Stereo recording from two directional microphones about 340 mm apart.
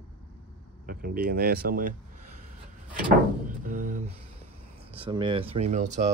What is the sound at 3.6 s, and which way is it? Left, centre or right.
Speech, right.